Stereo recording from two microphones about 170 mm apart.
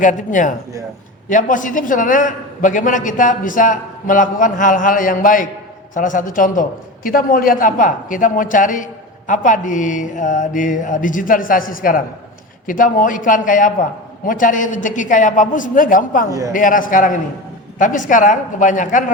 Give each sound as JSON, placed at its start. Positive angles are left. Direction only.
{"t": 0.0, "sound": "a man's voice", "side_deg": 50}